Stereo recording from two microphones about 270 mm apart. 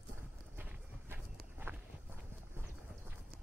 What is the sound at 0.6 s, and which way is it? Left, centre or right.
Walk, centre.